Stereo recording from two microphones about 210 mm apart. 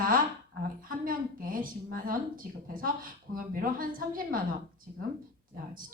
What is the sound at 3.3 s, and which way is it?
Speech, 40° right (ahead or behind).